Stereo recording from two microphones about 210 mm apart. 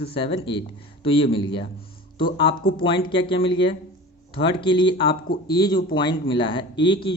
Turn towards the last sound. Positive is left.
turn(degrees=25)  # may be behind; listen again after turning